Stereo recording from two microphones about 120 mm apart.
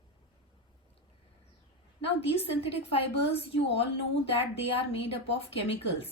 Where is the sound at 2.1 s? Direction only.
55° left (ahead or behind).